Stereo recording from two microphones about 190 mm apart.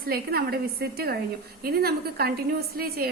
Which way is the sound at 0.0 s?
55° right (ahead or behind).